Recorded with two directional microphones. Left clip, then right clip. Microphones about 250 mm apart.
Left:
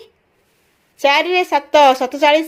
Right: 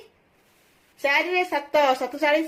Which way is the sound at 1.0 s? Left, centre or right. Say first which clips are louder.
Left 8 dB; left.